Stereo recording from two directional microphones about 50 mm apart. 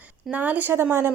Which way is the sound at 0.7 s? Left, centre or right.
Right.